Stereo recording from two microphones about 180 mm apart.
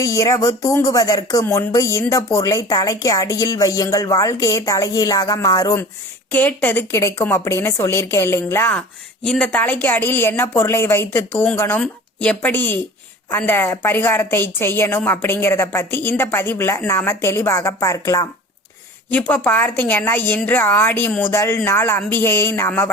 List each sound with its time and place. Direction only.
0.0 s a woman's voice: 15° left (ahead or behind)
19.3 s a woman's voice: 10° left (ahead or behind)